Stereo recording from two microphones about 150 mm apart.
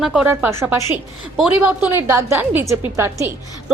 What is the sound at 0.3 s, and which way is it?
A woman's voice, 15° right (ahead or behind).